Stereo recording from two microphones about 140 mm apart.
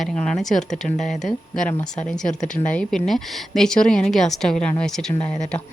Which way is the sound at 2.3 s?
60° left (ahead or behind).